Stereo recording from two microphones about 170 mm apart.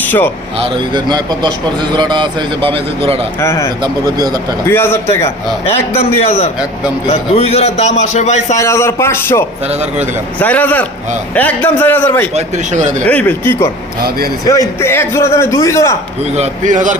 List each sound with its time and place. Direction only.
0.0 s a sound: 10° left (ahead or behind)
0.6 s a man's voice: 25° right (ahead or behind)
3.4 s a man's voice: 15° left (ahead or behind)
5.6 s a man's voice: 35° left (ahead or behind)
8.5 s a man's voice: 15° left (ahead or behind)
12.3 s speech: 45° right (ahead or behind)
13.1 s a man's voice: 10° left (ahead or behind)
14.8 s a man's voice: 15° left (ahead or behind)
16.3 s speech: 45° right (ahead or behind)